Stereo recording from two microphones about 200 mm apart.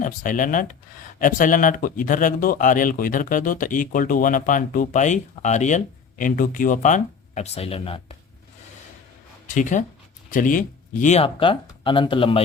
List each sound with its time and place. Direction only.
0.0 s speech: 40° left (ahead or behind)
9.6 s speech: 40° left (ahead or behind)